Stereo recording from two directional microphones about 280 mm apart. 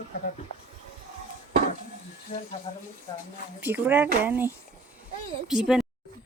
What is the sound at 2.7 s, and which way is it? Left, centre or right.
Speech, centre.